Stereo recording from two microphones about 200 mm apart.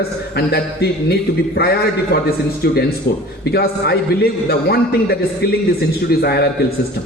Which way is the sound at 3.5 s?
50° left (ahead or behind).